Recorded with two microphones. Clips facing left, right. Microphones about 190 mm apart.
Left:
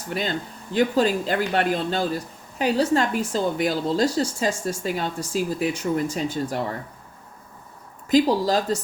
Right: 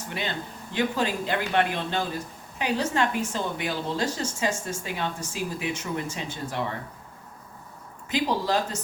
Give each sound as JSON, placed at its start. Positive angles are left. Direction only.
{"t": 0.7, "sound": "a woman's voice", "side_deg": 35}
{"t": 8.1, "sound": "a woman's voice", "side_deg": 35}